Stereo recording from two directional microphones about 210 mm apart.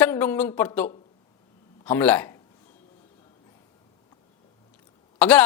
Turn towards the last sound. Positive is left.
turn(degrees=5)  # may be behind; listen again after turning